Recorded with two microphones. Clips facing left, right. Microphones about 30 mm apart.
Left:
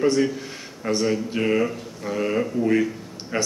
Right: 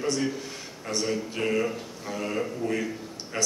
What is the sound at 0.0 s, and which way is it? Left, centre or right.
Speech, centre.